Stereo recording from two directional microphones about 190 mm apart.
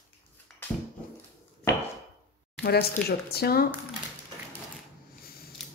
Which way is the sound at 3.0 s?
55° left (ahead or behind).